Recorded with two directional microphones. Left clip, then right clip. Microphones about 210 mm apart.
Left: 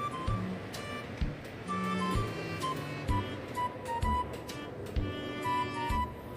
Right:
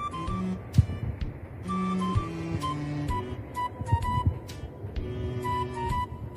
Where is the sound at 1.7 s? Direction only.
Centre (ahead or behind).